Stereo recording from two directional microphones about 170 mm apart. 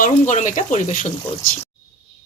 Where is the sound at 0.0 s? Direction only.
45° left (ahead or behind).